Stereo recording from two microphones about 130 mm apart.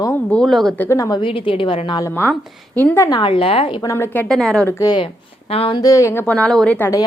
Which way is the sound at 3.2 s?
45° left (ahead or behind).